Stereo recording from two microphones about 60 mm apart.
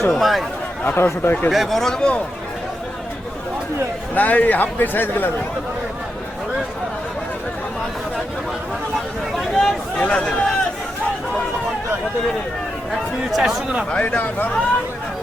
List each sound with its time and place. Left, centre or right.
0.1 s speech: centre
0.9 s speech: left
1.5 s speech: centre
2.0 s speech: centre
4.1 s speech: left
9.3 s a sound: centre
10.0 s speech: centre
13.3 s speech: centre
13.9 s speech: left